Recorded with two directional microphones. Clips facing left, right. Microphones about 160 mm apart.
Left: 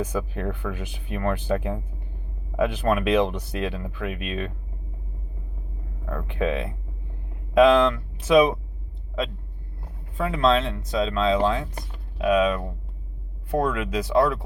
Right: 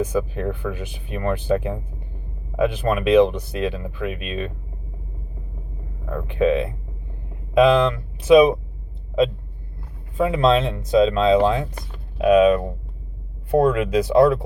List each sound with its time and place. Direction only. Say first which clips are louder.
0.0 s speech: right 5 dB; 5° right (ahead or behind)
6.1 s speech: right 7 dB; 5° right (ahead or behind)
10.2 s speech: right 4 dB; 15° right (ahead or behind)